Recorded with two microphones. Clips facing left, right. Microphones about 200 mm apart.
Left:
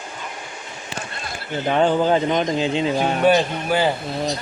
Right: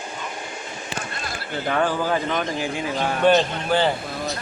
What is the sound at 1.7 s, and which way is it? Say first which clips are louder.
Speech: left 5 dB; 20° left (ahead or behind).